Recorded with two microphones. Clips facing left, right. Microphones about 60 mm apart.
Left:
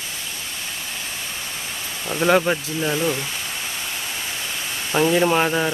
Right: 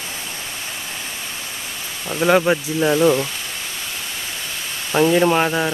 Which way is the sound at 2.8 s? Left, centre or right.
Right.